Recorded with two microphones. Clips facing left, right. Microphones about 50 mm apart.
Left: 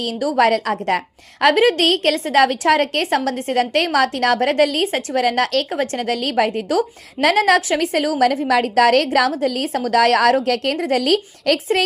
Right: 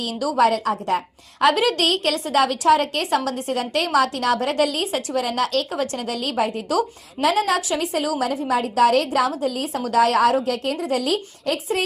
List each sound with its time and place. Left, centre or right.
0.0 s a woman's voice: left
6.5 s a woman's voice: left
7.2 s a woman's voice: left
8.4 s a woman's voice: left